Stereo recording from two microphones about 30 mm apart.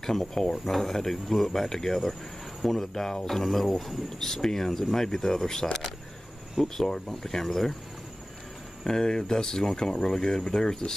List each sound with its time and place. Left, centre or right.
0.0 s speech: centre
4.3 s speech: centre
8.8 s speech: left